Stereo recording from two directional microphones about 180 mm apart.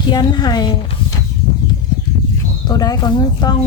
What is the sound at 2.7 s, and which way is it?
Speech, 20° left (ahead or behind).